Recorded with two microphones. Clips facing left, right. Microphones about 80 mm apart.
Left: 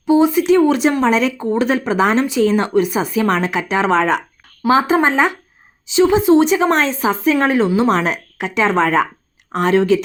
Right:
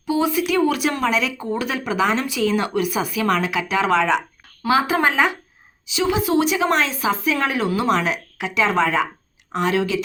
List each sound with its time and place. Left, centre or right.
0.0 s a woman's voice: left